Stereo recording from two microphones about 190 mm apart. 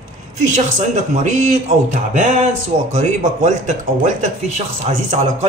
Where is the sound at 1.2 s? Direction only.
40° right (ahead or behind).